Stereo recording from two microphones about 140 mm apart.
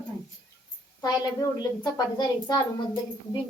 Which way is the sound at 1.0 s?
30° left (ahead or behind).